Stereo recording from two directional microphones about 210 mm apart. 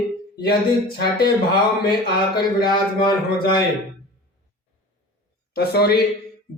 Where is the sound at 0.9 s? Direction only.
50° left (ahead or behind).